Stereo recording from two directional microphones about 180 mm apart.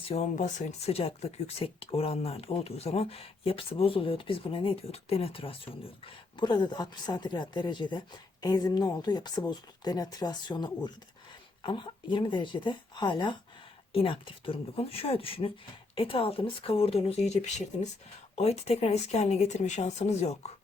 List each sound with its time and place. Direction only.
0.1 s a woman's voice: 40° left (ahead or behind)